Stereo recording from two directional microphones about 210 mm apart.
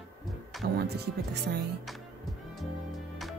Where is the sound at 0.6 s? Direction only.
50° right (ahead or behind).